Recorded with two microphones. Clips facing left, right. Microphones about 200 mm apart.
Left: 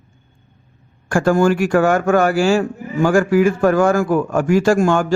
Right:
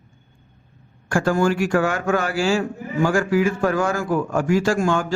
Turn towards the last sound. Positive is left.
turn(degrees=50)  # may be behind; listen again after turning